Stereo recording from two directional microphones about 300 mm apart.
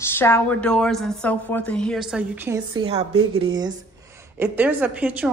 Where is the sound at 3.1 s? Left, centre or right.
Right.